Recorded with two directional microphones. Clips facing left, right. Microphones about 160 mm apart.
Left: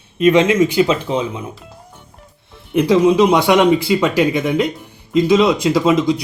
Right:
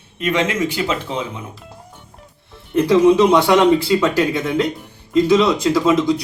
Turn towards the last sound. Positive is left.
turn(degrees=15)  # may be behind; listen again after turning